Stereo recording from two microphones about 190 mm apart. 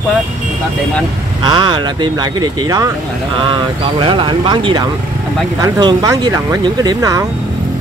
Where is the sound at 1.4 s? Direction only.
25° right (ahead or behind).